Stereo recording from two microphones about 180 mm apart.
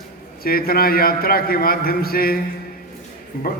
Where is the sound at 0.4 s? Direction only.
55° left (ahead or behind).